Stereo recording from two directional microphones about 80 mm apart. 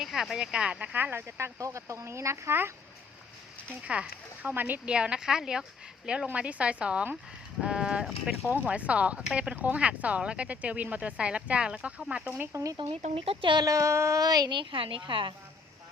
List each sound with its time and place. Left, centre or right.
0.0 s speech: centre; by 1.2 s right
1.4 s speech: right
3.9 s speech: centre
4.9 s speech: centre
8.4 s speech: centre
12.5 s speech: right
13.4 s a woman's voice: right
13.7 s speech: right
14.2 s a woman's voice: right